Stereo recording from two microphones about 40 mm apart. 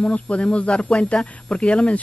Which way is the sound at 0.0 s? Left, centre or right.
Left.